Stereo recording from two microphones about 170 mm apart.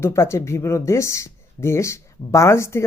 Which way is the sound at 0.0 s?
15° left (ahead or behind).